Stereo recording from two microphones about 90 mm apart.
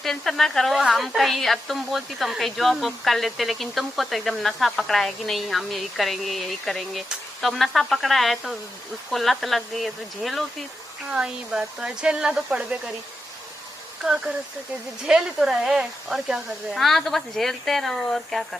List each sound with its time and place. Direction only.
0.0 s a woman's voice: 5° left (ahead or behind)
15.0 s a woman's voice: 5° right (ahead or behind)